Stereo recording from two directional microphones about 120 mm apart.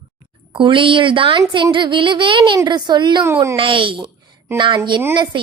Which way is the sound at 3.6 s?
45° right (ahead or behind).